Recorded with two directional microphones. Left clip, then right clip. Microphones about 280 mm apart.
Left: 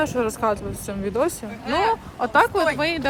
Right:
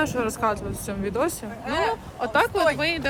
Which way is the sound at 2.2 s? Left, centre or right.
Centre.